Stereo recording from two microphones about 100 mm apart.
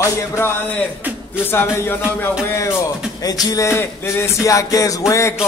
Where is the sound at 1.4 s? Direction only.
25° left (ahead or behind).